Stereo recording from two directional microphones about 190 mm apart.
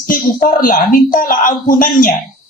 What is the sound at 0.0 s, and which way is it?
A woman's voice, 45° left (ahead or behind).